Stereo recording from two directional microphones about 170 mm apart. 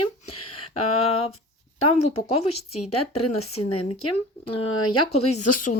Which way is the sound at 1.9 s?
35° left (ahead or behind).